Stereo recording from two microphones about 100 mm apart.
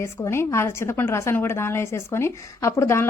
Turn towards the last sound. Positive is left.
turn(degrees=30)  # may be behind; listen again after turning